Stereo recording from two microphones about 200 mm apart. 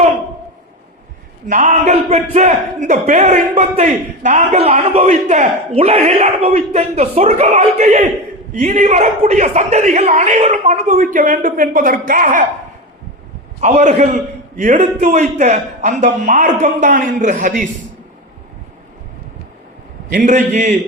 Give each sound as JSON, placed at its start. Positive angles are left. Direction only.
{"t": 1.5, "sound": "speech", "side_deg": -35}
{"t": 13.6, "sound": "speech", "side_deg": -35}
{"t": 20.1, "sound": "speech", "side_deg": -40}